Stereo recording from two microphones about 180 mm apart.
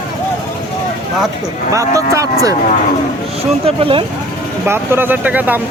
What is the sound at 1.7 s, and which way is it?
Speech, 15° right (ahead or behind).